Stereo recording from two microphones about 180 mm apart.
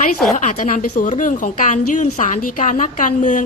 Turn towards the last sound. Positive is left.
turn(degrees=45)  # may be behind; listen again after turning